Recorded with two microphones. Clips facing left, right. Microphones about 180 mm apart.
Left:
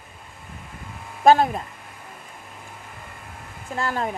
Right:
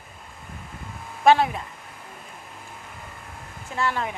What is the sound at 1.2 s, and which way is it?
Speech, 40° left (ahead or behind).